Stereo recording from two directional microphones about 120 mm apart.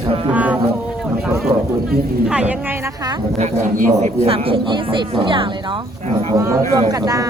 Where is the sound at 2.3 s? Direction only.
10° right (ahead or behind).